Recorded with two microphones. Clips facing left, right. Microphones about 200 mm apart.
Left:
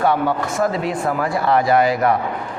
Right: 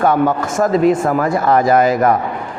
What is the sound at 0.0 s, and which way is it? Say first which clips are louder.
A man's voice: right 4 dB; 45° right (ahead or behind).